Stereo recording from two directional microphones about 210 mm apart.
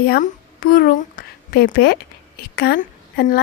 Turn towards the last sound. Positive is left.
turn(degrees=50)  # may be behind; listen again after turning